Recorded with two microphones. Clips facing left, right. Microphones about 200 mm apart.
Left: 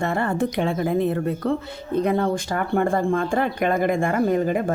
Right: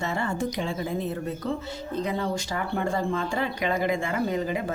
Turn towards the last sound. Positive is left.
turn(degrees=50)  # may be behind; listen again after turning